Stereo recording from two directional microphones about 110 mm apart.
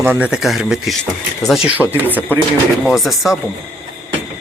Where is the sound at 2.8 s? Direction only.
Centre (ahead or behind).